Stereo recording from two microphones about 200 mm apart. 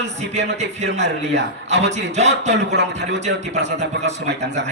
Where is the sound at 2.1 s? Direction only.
35° right (ahead or behind).